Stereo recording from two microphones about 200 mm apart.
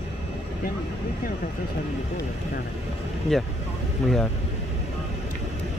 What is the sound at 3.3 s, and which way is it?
Speech, centre (ahead or behind).